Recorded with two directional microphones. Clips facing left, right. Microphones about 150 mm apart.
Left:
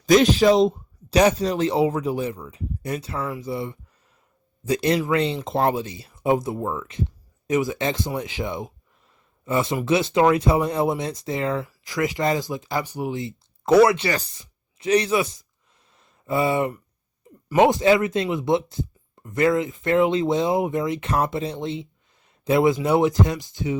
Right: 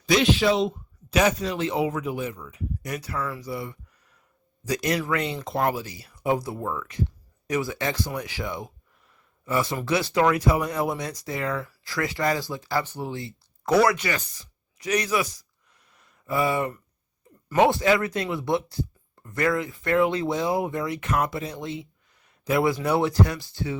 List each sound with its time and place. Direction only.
0.0 s speech: 40° left (ahead or behind); by 15.4 s 25° left (ahead or behind)
15.9 s a sound: 25° left (ahead or behind)
17.5 s speech: 20° left (ahead or behind)